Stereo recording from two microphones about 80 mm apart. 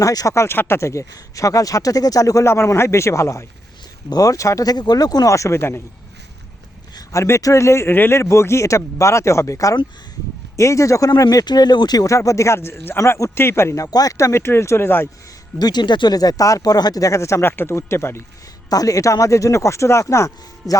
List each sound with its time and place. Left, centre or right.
0.0 s speech: left
0.3 s speech: left
7.1 s speech: left
13.0 s speech: left
13.3 s speech: left
15.5 s speech: left
18.7 s speech: left